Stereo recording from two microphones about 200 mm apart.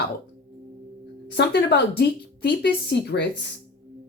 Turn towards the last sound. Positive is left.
turn(degrees=55)  # may be behind; listen again after turning